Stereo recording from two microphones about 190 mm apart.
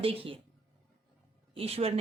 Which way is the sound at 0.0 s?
30° right (ahead or behind).